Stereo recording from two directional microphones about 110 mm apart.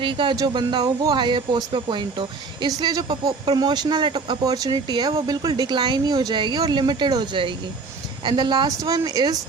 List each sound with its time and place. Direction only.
0.0 s speech: 50° right (ahead or behind)